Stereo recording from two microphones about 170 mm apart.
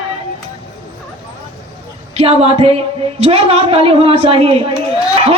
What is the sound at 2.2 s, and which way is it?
A woman's voice, 35° right (ahead or behind).